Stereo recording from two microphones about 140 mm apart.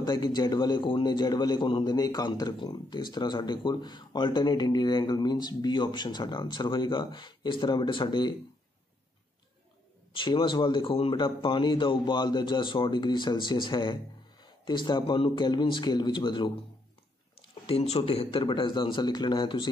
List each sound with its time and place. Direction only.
0.0 s a man's voice: 30° left (ahead or behind)
10.1 s a man's voice: 35° left (ahead or behind)
17.6 s a man's voice: 45° left (ahead or behind)